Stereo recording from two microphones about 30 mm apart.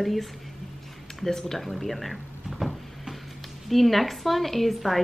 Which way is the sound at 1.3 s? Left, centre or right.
Centre.